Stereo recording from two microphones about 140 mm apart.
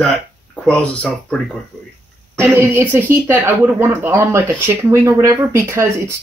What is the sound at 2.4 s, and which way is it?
Speech, 15° right (ahead or behind).